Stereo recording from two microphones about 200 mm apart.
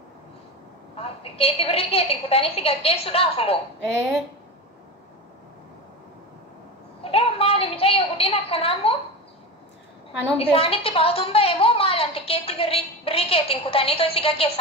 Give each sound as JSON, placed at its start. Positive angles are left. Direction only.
{"t": 0.9, "sound": "a woman's voice", "side_deg": 30}
{"t": 7.0, "sound": "a sound", "side_deg": 30}
{"t": 10.4, "sound": "a woman's voice", "side_deg": 30}